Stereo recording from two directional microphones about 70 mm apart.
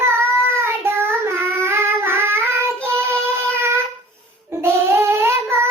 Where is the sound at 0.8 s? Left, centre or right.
Right.